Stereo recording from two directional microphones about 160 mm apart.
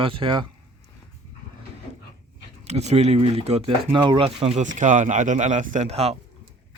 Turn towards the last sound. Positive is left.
turn(degrees=-40)  # may be behind; listen again after turning